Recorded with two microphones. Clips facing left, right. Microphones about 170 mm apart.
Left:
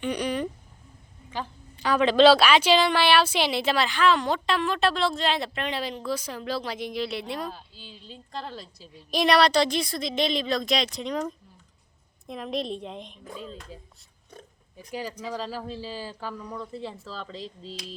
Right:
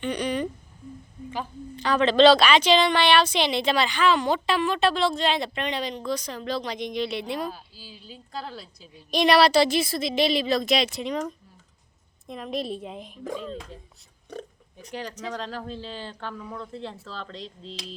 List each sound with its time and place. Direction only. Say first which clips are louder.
0.0 s a sound: right 1 dB; 10° left (ahead or behind)
1.7 s a woman's voice: even; 10° left (ahead or behind)
14.3 s oink: right 10 dB; 75° right (ahead or behind)
15.2 s a woman's voice: even; 5° left (ahead or behind)